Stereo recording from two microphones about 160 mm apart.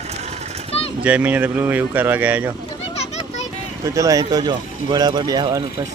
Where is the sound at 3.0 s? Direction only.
45° left (ahead or behind).